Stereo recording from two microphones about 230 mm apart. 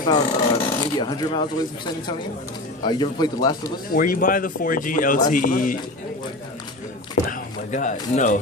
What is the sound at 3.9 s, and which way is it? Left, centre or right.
Speech, left.